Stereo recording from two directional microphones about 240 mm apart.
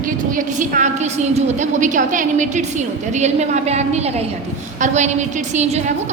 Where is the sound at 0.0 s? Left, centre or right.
Right.